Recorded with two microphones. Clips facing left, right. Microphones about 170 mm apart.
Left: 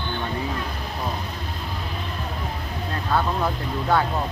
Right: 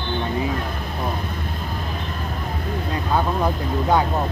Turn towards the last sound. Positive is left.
turn(degrees=-15)  # may be behind; listen again after turning